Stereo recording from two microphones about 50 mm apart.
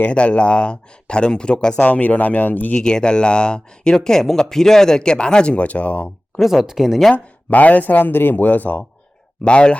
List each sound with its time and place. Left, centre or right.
0.1 s speech: left
1.8 s speech: left
2.7 s speech: centre
6.4 s speech: centre
7.1 s speech: left
9.4 s speech: left